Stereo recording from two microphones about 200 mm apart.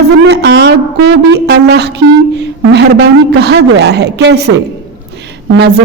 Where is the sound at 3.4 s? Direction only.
55° right (ahead or behind).